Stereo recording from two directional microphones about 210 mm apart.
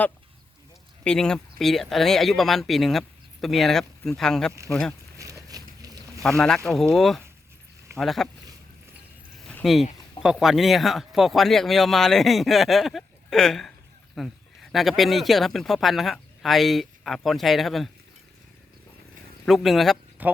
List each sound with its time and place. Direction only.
1.0 s speech: 5° left (ahead or behind)
5.1 s a sound: 15° right (ahead or behind)
6.7 s speech: centre (ahead or behind)
9.5 s a sound: centre (ahead or behind)
10.2 s speech: centre (ahead or behind)
19.5 s speech: centre (ahead or behind)